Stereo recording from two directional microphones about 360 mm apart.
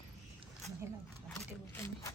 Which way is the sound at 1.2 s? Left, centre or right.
Centre.